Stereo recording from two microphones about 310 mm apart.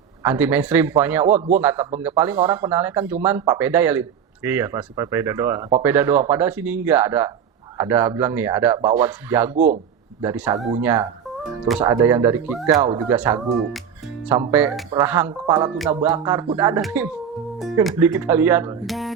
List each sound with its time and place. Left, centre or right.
0.2 s speech: centre
9.6 s speech: right
10.2 s speech: centre